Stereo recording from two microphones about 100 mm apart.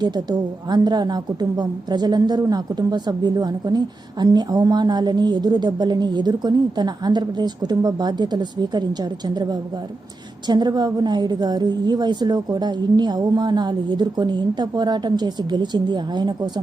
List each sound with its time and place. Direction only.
0.0 s a woman's voice: 45° right (ahead or behind)